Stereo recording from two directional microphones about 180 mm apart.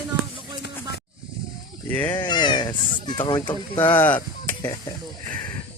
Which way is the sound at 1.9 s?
10° left (ahead or behind).